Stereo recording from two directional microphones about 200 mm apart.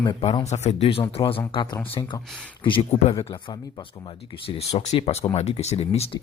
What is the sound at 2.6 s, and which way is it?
Speech, 30° left (ahead or behind).